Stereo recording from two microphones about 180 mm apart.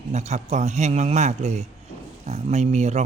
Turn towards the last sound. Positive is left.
turn(degrees=-40)  # may be behind; listen again after turning